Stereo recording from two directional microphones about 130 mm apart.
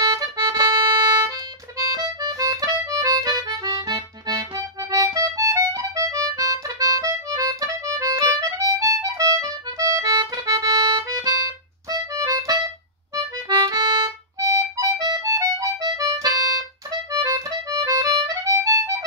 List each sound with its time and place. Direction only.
0.0 s music: 30° right (ahead or behind)
1.8 s accordion: 30° right (ahead or behind)
11.9 s music: 25° right (ahead or behind)